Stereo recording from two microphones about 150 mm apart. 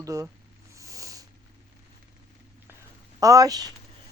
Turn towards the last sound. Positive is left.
turn(degrees=-25)  # may be behind; listen again after turning